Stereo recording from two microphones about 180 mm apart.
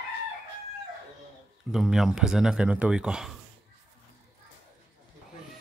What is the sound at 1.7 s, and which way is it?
Speech, centre (ahead or behind).